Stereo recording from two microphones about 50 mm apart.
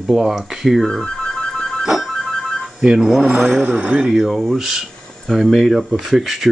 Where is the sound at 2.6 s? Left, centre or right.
Centre.